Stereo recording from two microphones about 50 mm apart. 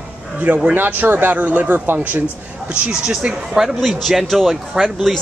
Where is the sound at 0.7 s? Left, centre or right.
Right.